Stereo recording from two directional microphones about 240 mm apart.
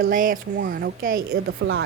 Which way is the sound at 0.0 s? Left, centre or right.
Right.